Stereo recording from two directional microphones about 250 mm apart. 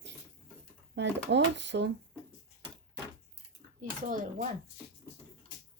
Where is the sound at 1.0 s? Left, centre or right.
Right.